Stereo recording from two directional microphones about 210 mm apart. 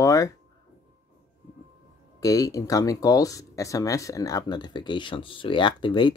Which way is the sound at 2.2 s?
15° left (ahead or behind).